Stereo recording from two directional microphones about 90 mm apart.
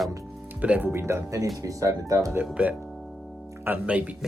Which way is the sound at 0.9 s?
30° right (ahead or behind).